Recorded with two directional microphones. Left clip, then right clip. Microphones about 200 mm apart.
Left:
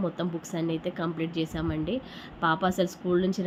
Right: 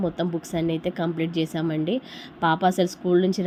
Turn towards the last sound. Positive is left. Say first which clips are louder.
# right 5 dB
turn(degrees=-20)  # may be behind; listen again after turning